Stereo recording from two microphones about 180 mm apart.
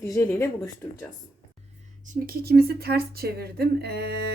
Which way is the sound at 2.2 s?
60° right (ahead or behind).